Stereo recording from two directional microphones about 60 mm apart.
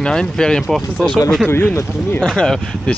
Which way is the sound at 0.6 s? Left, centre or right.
Centre.